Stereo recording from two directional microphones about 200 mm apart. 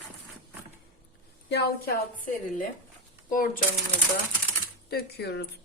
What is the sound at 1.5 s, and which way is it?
Speech, 50° left (ahead or behind).